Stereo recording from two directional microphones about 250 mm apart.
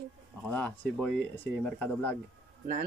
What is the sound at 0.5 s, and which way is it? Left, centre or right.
Speech, centre.